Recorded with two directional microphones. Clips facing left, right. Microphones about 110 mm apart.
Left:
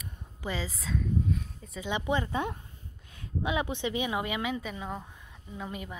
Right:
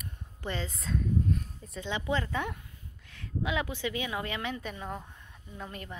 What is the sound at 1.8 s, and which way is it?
Speech, 20° left (ahead or behind).